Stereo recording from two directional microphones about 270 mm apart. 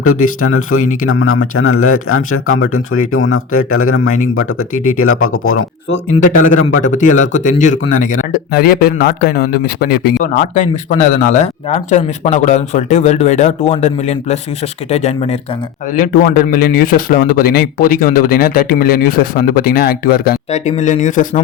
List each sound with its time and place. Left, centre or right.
0.0 s speech: left
6.1 s speech: left
6.5 s speech: left
6.8 s speech: left